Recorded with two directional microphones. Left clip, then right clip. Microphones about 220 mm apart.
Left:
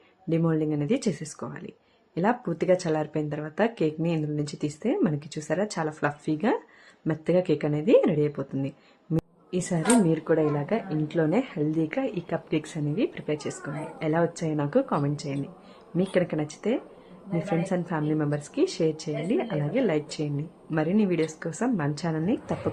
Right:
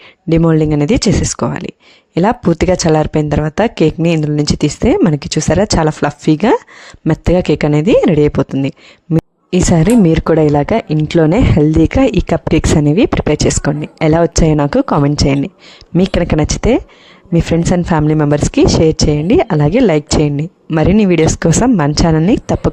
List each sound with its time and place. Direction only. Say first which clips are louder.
0.3 s speech: right 14 dB; 45° right (ahead or behind)